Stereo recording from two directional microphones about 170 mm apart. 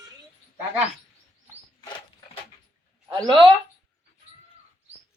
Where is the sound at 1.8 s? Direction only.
30° left (ahead or behind).